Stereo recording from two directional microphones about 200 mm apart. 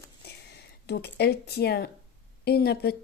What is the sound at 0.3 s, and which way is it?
A woman's voice, 55° left (ahead or behind).